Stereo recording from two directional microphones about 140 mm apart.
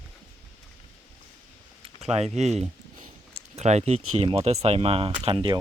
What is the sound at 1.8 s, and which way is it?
Speech, 50° right (ahead or behind).